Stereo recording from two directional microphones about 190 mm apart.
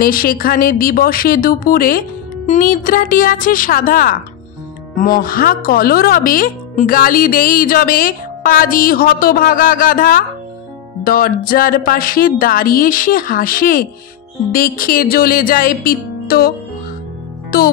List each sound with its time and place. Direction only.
0.0 s speech: 50° left (ahead or behind)